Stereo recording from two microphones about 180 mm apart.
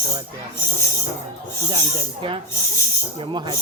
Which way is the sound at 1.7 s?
25° right (ahead or behind).